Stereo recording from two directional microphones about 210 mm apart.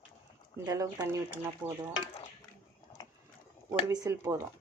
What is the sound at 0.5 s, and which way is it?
Cutlery, 15° right (ahead or behind).